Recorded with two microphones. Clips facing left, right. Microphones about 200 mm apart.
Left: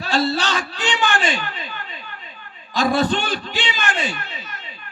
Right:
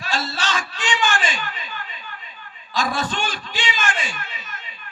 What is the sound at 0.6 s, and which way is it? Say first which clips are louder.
Speech: left 4 dB; 35° left (ahead or behind).